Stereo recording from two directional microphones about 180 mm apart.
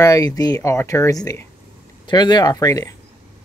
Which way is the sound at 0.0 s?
20° left (ahead or behind).